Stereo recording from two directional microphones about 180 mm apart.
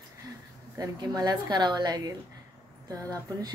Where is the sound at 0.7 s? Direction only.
20° right (ahead or behind).